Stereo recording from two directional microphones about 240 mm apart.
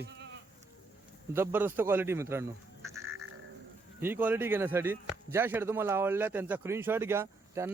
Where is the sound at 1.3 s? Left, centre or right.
Centre.